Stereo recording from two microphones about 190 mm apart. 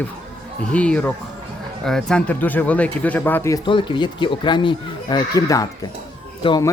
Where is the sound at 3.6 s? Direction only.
25° left (ahead or behind).